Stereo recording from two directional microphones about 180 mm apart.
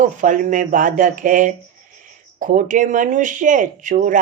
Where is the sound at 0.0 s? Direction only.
45° right (ahead or behind).